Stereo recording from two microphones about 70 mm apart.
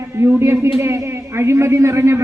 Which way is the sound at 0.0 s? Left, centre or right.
Right.